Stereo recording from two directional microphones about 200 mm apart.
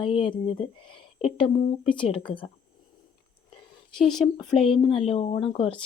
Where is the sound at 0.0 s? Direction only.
25° left (ahead or behind).